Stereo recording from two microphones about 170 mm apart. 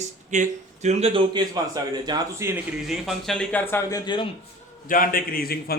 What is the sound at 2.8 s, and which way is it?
Speech, centre (ahead or behind).